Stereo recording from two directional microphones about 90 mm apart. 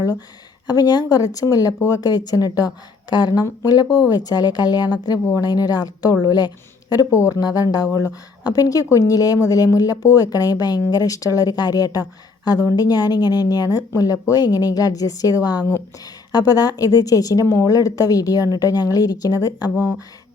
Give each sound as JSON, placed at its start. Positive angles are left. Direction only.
{"t": 0.7, "sound": "a woman's voice", "side_deg": 50}